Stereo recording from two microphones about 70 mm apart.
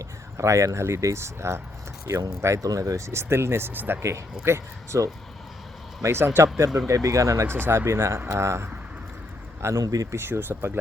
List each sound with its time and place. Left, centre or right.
0.3 s speech: right
2.6 s speech: right
4.4 s speech: right
6.7 s speech: right
7.5 s speech: right
9.8 s speech: right
10.2 s speech: right